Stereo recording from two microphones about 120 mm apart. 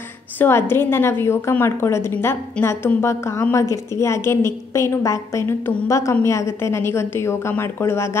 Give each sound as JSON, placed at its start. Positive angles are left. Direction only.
{"t": 0.4, "sound": "a woman's voice", "side_deg": 20}